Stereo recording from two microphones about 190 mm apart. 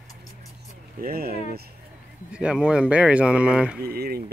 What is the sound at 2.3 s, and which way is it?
Speech, 5° right (ahead or behind).